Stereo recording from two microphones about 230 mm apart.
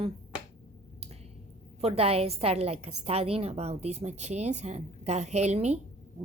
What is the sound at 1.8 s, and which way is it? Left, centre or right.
Speech, right.